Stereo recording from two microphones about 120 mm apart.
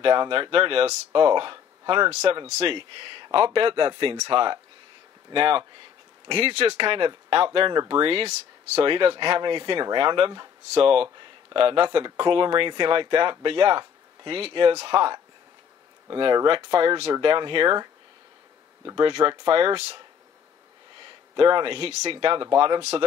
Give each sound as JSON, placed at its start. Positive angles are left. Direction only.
{"t": 0.0, "sound": "speech", "side_deg": -40}
{"t": 16.4, "sound": "speech", "side_deg": -45}
{"t": 18.9, "sound": "speech", "side_deg": -35}
{"t": 21.4, "sound": "speech", "side_deg": -45}
{"t": 22.8, "sound": "speech", "side_deg": -55}